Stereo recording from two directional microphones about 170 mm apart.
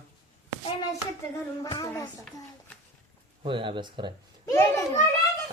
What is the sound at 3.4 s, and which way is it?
Speech, 30° right (ahead or behind).